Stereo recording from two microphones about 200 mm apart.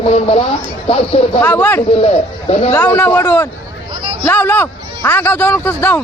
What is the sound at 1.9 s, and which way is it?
Speech, 30° left (ahead or behind).